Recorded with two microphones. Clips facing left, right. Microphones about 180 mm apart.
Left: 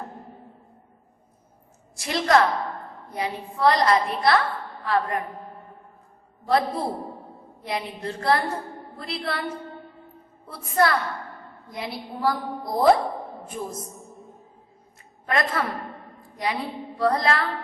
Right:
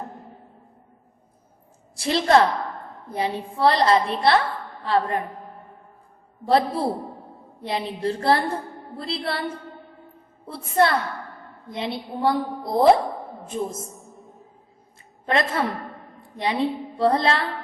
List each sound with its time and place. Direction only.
2.0 s a woman's voice: 30° right (ahead or behind)
6.4 s a man's voice: 30° right (ahead or behind)
13.9 s music: centre (ahead or behind)
15.3 s a woman's voice: 25° right (ahead or behind)